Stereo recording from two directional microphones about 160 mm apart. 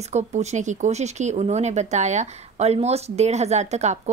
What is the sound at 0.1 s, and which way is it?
Speech, 45° right (ahead or behind).